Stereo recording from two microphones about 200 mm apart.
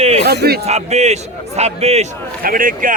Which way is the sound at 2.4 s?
45° right (ahead or behind).